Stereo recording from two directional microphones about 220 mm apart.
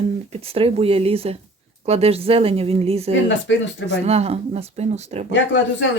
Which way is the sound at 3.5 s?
55° left (ahead or behind).